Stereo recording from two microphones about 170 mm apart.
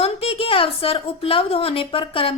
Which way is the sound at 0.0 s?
35° left (ahead or behind).